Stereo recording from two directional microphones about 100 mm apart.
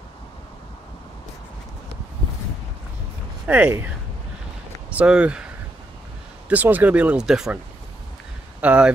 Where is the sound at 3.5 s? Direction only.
20° right (ahead or behind).